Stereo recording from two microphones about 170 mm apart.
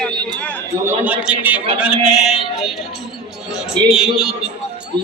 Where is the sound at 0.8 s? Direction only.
10° right (ahead or behind).